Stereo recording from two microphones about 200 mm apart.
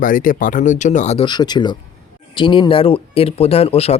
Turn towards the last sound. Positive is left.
turn(degrees=30)  # may be behind; listen again after turning